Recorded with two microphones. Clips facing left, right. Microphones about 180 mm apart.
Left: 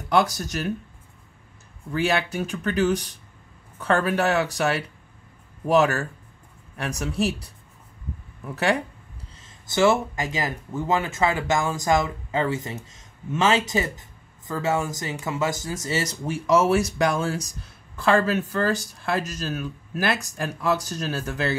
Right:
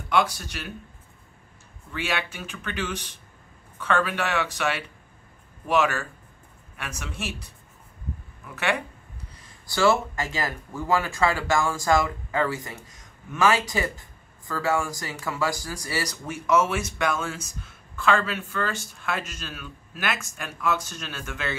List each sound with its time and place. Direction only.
0.1 s speech: 40° left (ahead or behind)
1.9 s speech: 40° left (ahead or behind)
8.5 s speech: 35° left (ahead or behind)
9.4 s speech: 20° left (ahead or behind); by 21.5 s 35° left (ahead or behind)